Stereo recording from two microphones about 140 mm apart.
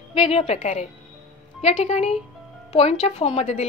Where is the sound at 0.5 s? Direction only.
60° left (ahead or behind).